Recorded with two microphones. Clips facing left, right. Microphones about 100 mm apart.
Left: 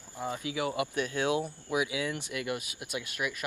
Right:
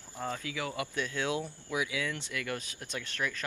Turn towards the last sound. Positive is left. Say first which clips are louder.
# left 1 dB
turn(degrees=15)  # may be behind; listen again after turning